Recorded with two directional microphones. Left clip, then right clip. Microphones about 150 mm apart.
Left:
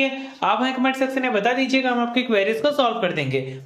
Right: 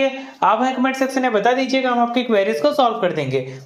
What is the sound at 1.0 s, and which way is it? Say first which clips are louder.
Speech: right 3 dB; 15° right (ahead or behind).